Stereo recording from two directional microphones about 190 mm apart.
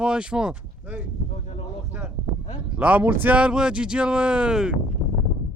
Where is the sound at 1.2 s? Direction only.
35° left (ahead or behind).